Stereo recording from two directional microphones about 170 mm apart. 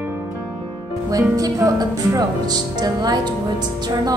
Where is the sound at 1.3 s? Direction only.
20° right (ahead or behind).